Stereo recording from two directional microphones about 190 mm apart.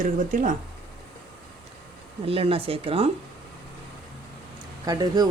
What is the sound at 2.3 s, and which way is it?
Speech, 30° right (ahead or behind).